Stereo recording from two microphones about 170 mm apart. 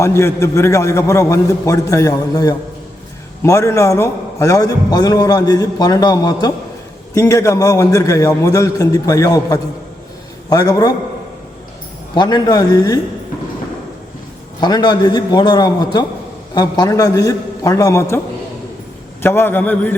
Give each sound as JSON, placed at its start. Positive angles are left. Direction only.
{"t": 0.0, "sound": "a man's voice", "side_deg": 15}
{"t": 12.1, "sound": "a man's voice", "side_deg": 25}
{"t": 14.6, "sound": "a man's voice", "side_deg": 25}
{"t": 19.2, "sound": "a man's voice", "side_deg": 15}